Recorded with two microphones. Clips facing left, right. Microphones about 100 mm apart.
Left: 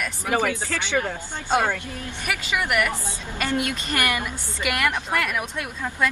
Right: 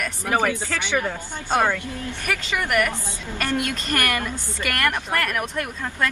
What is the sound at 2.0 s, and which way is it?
A woman's voice, 10° left (ahead or behind).